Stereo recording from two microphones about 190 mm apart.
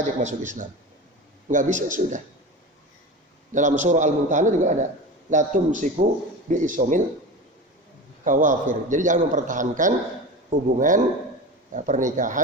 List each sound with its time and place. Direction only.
0.0 s a man's voice: 40° right (ahead or behind)
3.5 s a man's voice: 40° right (ahead or behind)
8.2 s a man's voice: 45° right (ahead or behind)